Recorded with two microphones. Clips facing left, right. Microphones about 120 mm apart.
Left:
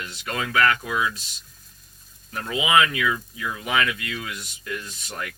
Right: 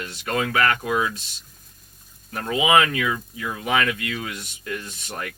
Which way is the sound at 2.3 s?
40° right (ahead or behind).